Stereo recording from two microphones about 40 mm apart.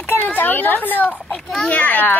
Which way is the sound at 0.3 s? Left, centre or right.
Left.